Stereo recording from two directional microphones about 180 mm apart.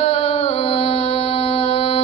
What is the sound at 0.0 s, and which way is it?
Music, 35° left (ahead or behind).